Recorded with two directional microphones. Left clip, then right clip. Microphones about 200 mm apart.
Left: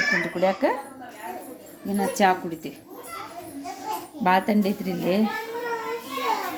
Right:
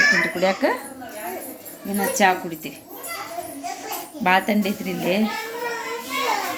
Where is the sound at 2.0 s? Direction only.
15° left (ahead or behind).